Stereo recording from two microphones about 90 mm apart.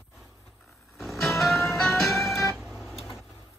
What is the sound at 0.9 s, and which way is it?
Music, centre (ahead or behind).